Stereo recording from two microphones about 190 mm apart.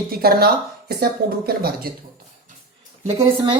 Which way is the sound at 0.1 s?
55° right (ahead or behind).